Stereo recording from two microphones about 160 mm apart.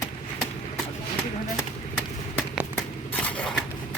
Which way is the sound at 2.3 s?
5° right (ahead or behind).